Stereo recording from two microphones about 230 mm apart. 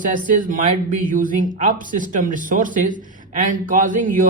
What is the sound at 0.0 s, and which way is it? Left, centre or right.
Speech, right.